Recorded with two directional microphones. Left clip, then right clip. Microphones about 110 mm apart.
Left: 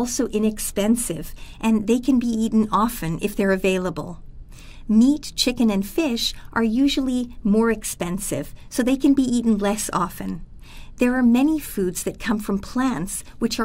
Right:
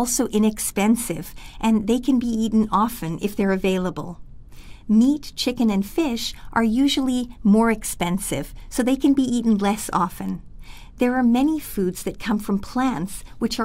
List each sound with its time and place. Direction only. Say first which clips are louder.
0.0 s speech: right 1 dB; 90° right; by 0.9 s 70° right (ahead or behind)
1.1 s a woman's voice: right 1 dB; 45° right (ahead or behind)
6.5 s a woman's voice: right 2 dB; 85° right; by 13.6 s 30° right (ahead or behind)